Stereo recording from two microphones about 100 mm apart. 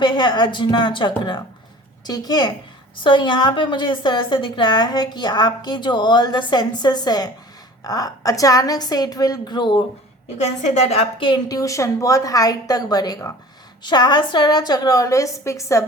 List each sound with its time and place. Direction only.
0.0 s a woman's voice: 45° left (ahead or behind)
3.0 s a woman's voice: 50° left (ahead or behind)
10.8 s a woman's voice: 90° left
11.3 s a woman's voice: 40° left (ahead or behind)